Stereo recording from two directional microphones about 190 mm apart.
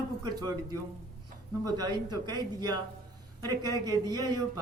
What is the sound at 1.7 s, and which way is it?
A man's voice, 20° right (ahead or behind).